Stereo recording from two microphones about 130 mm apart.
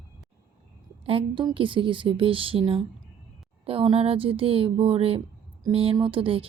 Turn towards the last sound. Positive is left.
turn(degrees=-45)  # may be behind; listen again after turning